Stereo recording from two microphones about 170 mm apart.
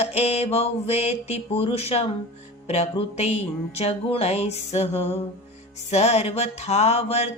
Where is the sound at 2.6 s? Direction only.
40° left (ahead or behind).